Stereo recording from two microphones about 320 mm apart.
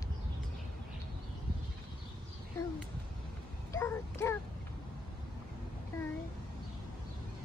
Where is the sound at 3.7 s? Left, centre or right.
Centre.